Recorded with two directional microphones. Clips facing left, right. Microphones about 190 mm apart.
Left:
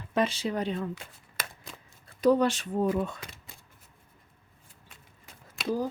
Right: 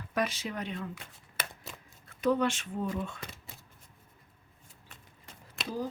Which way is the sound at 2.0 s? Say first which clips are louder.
Left 5 dB; 35° left (ahead or behind).